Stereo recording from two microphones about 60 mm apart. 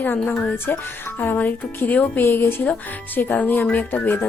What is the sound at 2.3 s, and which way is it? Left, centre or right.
Speech, left.